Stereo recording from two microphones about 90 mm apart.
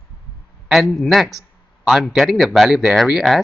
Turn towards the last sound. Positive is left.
turn(degrees=-5)  # may be behind; listen again after turning